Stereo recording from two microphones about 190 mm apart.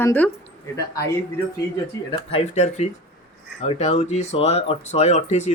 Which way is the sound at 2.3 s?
35° left (ahead or behind).